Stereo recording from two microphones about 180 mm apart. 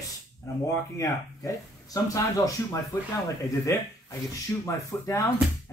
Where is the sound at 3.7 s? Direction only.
15° left (ahead or behind).